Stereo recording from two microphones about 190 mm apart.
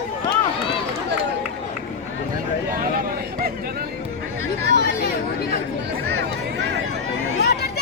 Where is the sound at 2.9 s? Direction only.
50° right (ahead or behind).